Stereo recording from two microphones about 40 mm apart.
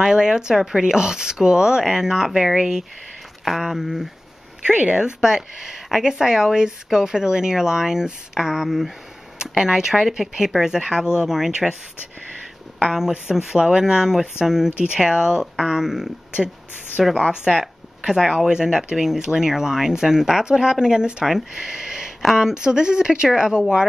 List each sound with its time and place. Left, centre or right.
0.0 s speech: centre
4.6 s speech: right; by 11.5 s centre
13.3 s speech: centre
17.6 s a sound: centre
18.2 s speech: centre
18.5 s speech: centre
22.5 s speech: right